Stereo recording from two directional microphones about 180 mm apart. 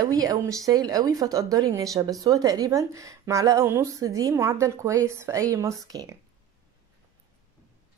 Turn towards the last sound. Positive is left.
turn(degrees=-20)  # may be behind; listen again after turning